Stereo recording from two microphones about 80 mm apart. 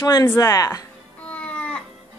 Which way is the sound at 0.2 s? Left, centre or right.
Left.